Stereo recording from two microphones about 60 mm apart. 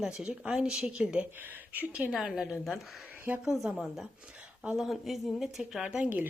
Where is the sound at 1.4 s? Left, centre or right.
Right.